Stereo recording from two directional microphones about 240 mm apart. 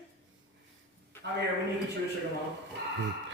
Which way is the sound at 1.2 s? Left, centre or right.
Right.